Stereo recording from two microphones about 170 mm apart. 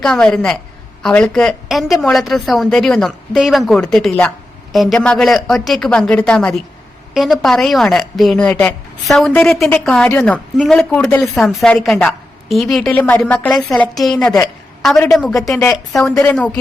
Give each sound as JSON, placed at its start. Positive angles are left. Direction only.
{"t": 0.0, "sound": "a woman's voice", "side_deg": 5}
{"t": 14.9, "sound": "a woman's voice", "side_deg": 20}
{"t": 15.9, "sound": "a woman's voice", "side_deg": 0}